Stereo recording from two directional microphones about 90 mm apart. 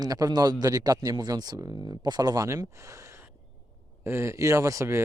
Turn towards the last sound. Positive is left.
turn(degrees=-35)  # may be behind; listen again after turning